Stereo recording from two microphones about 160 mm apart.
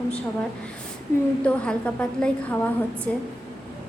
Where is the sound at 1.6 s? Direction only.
5° left (ahead or behind).